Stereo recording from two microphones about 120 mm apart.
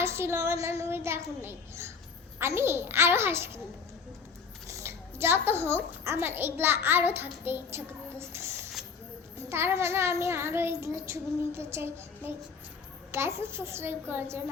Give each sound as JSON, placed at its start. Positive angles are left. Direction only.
{"t": 0.0, "sound": "a child's voice", "side_deg": -20}
{"t": 4.7, "sound": "a child's voice", "side_deg": -20}